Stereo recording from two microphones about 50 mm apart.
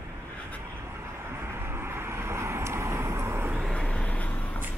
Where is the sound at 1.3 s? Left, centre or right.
Right.